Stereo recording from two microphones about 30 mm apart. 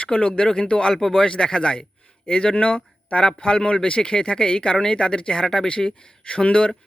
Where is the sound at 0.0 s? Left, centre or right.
Left.